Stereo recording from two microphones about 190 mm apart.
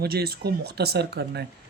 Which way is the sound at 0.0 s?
55° right (ahead or behind).